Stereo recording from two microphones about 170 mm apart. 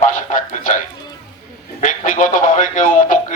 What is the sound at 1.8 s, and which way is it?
A man's voice, 50° left (ahead or behind).